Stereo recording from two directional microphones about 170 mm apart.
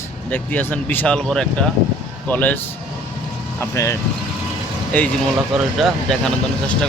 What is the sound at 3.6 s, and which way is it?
Speech, 15° left (ahead or behind).